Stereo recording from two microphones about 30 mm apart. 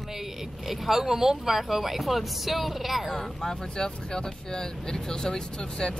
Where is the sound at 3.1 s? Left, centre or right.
Left.